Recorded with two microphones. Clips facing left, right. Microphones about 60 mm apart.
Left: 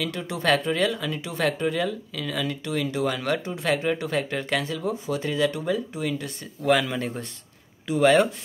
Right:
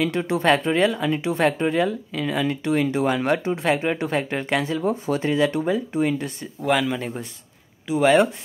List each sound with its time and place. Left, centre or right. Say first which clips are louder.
0.0 s speech: right 6 dB; right
6.6 s speech: even; centre